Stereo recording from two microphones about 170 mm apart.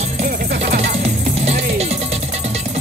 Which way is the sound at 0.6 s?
40° right (ahead or behind).